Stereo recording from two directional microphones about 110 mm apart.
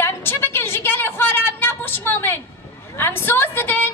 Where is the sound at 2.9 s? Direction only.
20° left (ahead or behind).